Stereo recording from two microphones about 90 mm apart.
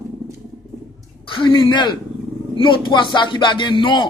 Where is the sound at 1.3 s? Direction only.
70° left (ahead or behind).